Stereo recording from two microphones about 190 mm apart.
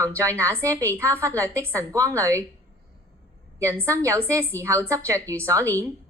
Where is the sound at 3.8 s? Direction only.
15° right (ahead or behind).